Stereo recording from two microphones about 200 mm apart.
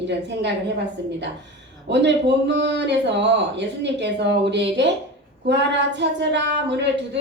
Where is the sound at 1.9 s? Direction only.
60° right (ahead or behind).